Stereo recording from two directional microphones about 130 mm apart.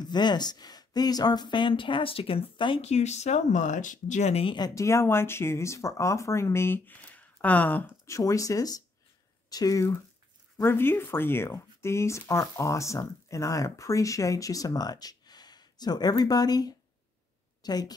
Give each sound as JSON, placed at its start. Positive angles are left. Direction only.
{"t": 0.0, "sound": "speech", "side_deg": 35}
{"t": 2.9, "sound": "speech", "side_deg": 60}
{"t": 4.6, "sound": "speech", "side_deg": 25}
{"t": 8.1, "sound": "a woman's voice", "side_deg": 25}